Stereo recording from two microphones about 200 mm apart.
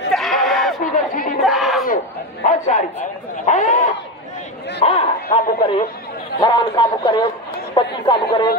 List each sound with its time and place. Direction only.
0.1 s sheep: centre (ahead or behind)
0.9 s crowd: 45° left (ahead or behind)
1.4 s battle cry: centre (ahead or behind)
2.4 s a man's voice: 35° left (ahead or behind); by 8.5 s 20° left (ahead or behind)